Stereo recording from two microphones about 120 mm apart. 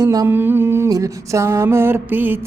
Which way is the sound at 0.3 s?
15° right (ahead or behind).